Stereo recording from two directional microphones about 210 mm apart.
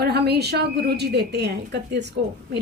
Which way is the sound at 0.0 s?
50° right (ahead or behind).